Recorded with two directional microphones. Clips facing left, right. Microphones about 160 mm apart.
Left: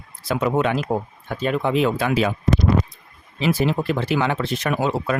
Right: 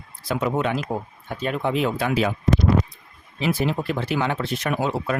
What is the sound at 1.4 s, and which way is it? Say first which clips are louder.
Speech: left 3 dB; 90° left.